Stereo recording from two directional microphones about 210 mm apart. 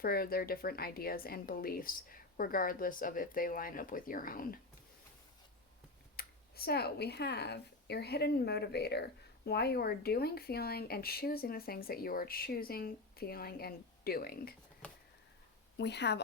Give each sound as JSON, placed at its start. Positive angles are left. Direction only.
{"t": 0.0, "sound": "speech", "side_deg": 45}
{"t": 6.1, "sound": "speech", "side_deg": 45}
{"t": 15.8, "sound": "speech", "side_deg": 55}